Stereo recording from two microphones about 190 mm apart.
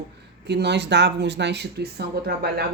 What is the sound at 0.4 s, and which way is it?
Speech, 60° right (ahead or behind).